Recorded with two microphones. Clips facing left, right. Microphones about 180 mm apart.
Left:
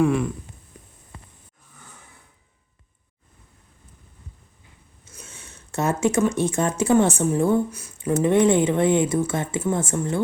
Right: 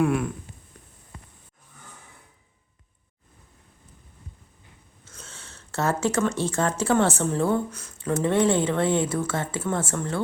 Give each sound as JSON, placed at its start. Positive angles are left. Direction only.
{"t": 0.0, "sound": "speech", "side_deg": -5}
{"t": 5.0, "sound": "speech", "side_deg": 15}